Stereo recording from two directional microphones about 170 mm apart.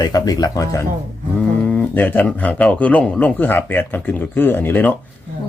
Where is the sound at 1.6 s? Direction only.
5° left (ahead or behind).